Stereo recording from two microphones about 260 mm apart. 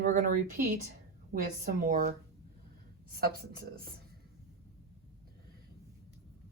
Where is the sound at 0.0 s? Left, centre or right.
Right.